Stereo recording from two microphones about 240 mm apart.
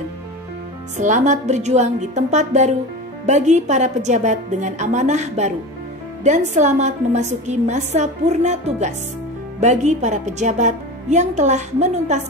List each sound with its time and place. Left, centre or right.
0.9 s a woman's voice: right